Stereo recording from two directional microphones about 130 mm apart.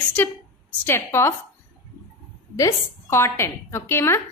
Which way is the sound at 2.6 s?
20° left (ahead or behind).